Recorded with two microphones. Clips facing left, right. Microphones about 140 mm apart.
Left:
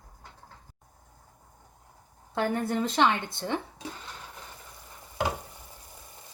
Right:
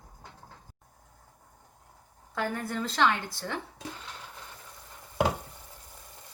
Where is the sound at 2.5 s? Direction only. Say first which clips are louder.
Left 5 dB; 20° left (ahead or behind).